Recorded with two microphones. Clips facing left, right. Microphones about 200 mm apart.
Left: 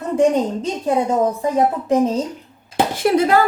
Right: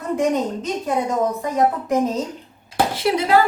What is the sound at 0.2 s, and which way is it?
Speech, 30° left (ahead or behind).